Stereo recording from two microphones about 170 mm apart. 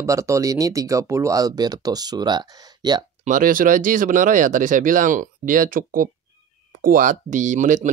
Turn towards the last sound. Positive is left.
turn(degrees=-45)  # may be behind; listen again after turning